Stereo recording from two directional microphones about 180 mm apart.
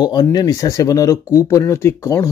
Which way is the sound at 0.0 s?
25° left (ahead or behind).